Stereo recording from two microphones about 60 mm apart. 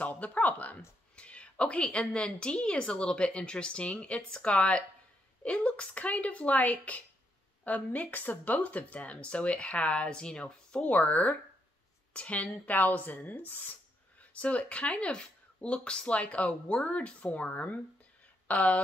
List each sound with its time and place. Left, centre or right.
0.0 s speech: left